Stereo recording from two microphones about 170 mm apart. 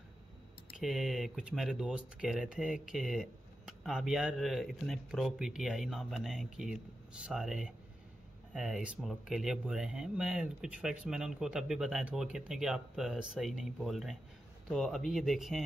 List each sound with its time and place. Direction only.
0.7 s speech: centre (ahead or behind)